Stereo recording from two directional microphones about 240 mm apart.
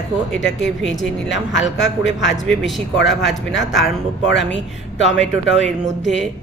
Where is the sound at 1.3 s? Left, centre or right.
Left.